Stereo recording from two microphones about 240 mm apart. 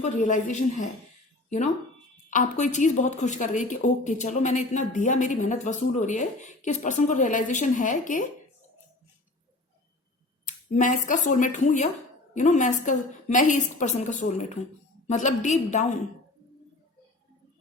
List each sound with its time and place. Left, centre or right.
0.0 s a woman's voice: left
10.4 s a woman's voice: left